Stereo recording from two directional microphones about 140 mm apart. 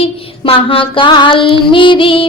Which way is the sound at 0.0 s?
40° left (ahead or behind).